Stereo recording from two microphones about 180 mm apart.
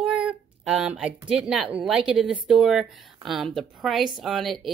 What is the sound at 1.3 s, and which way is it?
A woman's voice, 5° right (ahead or behind).